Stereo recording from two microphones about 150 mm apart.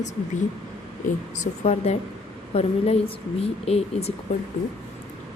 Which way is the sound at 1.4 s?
45° left (ahead or behind).